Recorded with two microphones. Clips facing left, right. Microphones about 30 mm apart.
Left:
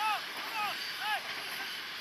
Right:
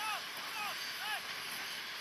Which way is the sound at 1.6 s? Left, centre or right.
Left.